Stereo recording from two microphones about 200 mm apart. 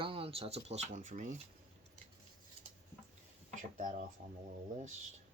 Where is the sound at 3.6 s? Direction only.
40° right (ahead or behind).